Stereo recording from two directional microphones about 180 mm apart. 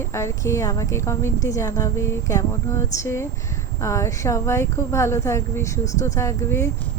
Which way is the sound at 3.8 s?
15° left (ahead or behind).